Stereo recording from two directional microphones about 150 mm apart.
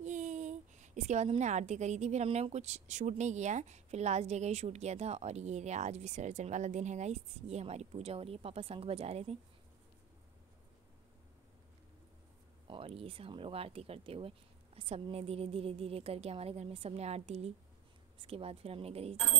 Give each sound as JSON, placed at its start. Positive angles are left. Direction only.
{"t": 0.0, "sound": "a woman's voice", "side_deg": -55}
{"t": 12.6, "sound": "speech", "side_deg": -35}